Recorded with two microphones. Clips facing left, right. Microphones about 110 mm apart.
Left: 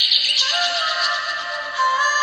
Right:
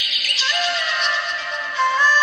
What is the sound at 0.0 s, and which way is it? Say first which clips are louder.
Music: right 2 dB; 15° left (ahead or behind).